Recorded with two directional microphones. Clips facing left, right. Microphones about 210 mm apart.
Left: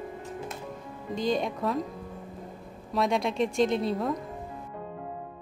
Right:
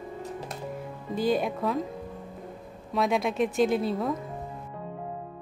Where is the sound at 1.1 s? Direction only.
5° right (ahead or behind).